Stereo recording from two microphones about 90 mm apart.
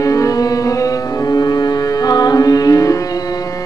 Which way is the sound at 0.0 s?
40° left (ahead or behind).